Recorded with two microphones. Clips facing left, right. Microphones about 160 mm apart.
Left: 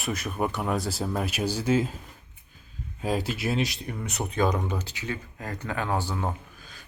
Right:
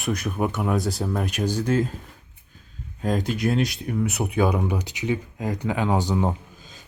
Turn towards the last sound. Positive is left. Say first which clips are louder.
# right 2 dB
turn(degrees=-20)  # may be behind; listen again after turning